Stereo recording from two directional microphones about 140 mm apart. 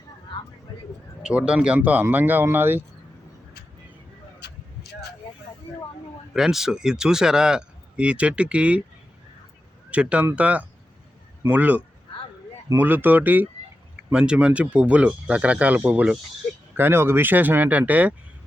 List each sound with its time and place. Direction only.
0.7 s a sound: 30° left (ahead or behind)
1.2 s speech: 5° right (ahead or behind)
6.3 s speech: 5° right (ahead or behind)
9.9 s speech: 10° right (ahead or behind)